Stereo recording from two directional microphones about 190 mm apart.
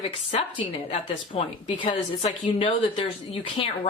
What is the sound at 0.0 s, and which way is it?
Speech, 30° left (ahead or behind).